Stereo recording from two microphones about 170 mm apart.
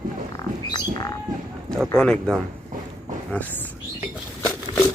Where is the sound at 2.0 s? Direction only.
5° left (ahead or behind).